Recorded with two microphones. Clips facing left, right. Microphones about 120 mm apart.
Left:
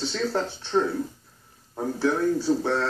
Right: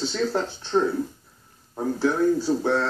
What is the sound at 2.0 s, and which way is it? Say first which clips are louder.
Speech: right 2 dB; 15° right (ahead or behind).